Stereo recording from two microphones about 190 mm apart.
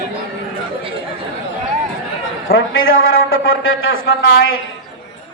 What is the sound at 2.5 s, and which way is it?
A man's voice, 90° left.